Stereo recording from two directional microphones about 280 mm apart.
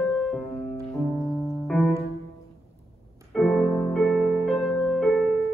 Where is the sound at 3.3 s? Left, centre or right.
Centre.